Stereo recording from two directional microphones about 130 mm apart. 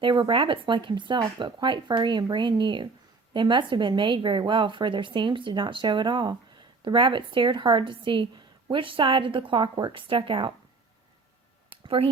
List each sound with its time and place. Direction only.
0.0 s a woman's voice: 40° right (ahead or behind)
11.9 s speech: 45° right (ahead or behind)